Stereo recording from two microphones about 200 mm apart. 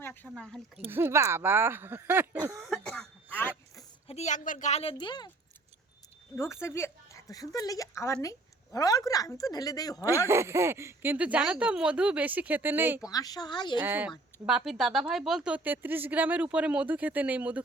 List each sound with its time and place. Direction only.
0.0 s speech: 10° left (ahead or behind)
0.9 s speech: 10° right (ahead or behind)
2.6 s throat clearing: centre (ahead or behind)
4.0 s a woman's voice: 35° left (ahead or behind)
6.3 s speech: 15° left (ahead or behind)
10.2 s speech: 15° right (ahead or behind)
13.1 s speech: 20° left (ahead or behind)
13.7 s speech: 10° right (ahead or behind)